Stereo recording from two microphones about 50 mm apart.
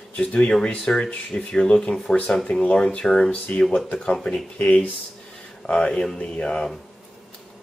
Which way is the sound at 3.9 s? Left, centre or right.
Left.